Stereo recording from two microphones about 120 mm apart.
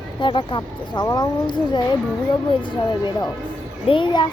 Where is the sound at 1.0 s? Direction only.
35° left (ahead or behind).